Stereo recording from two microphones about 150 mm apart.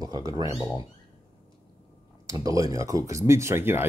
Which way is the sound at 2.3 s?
20° right (ahead or behind).